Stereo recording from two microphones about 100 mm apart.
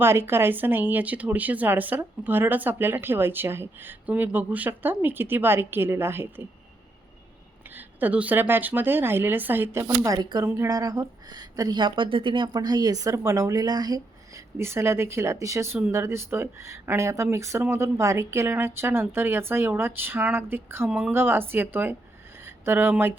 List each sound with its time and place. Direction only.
0.0 s speech: 25° right (ahead or behind)
7.8 s speech: 15° right (ahead or behind)
9.8 s speech: 35° right (ahead or behind)
11.8 s speech: 55° right (ahead or behind)
12.5 s speech: 40° right (ahead or behind)
14.6 s speech: 25° right (ahead or behind)